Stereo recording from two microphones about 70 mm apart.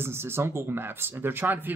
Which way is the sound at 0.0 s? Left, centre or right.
Right.